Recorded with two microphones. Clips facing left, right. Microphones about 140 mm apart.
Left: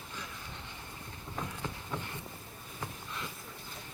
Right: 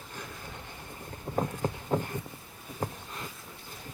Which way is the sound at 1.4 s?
45° right (ahead or behind).